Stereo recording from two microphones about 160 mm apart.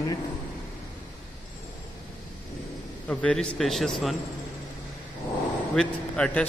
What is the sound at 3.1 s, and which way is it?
A man's voice, 5° left (ahead or behind).